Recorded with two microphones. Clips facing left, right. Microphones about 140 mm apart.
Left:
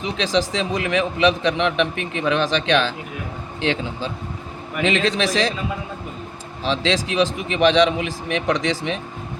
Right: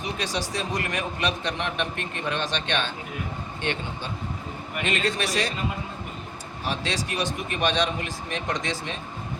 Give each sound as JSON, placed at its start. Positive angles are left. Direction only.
{"t": 0.0, "sound": "a man's voice", "side_deg": 90}
{"t": 6.7, "sound": "a man's voice", "side_deg": 90}